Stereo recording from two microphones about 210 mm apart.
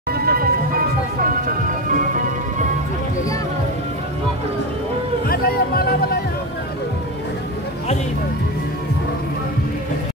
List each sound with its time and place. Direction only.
0.1 s music: 45° right (ahead or behind)
5.3 s music: 45° left (ahead or behind)